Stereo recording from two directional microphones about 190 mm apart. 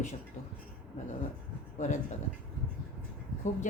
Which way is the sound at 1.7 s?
40° left (ahead or behind).